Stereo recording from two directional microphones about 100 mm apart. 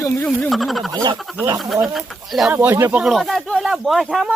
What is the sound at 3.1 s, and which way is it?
Speech, centre (ahead or behind).